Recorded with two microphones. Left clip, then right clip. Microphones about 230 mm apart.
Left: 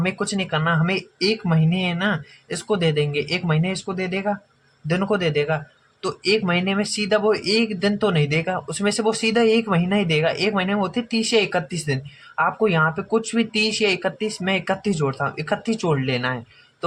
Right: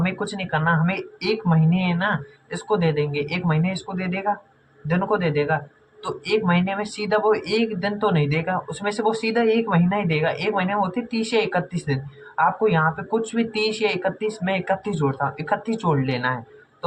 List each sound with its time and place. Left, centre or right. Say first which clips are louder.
0.0 s speech: left 2 dB; left